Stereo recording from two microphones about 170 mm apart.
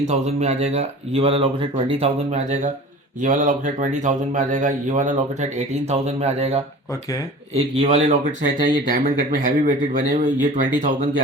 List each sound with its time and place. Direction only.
0.0 s a man's voice: 40° right (ahead or behind)